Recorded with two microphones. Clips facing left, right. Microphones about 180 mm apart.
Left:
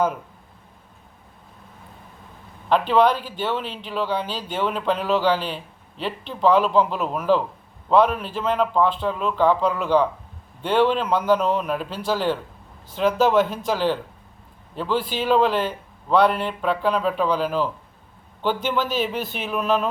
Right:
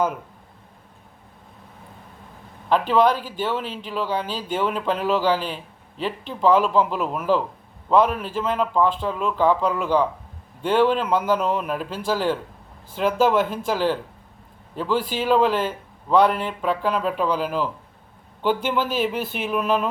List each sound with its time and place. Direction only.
2.9 s speech: 10° right (ahead or behind)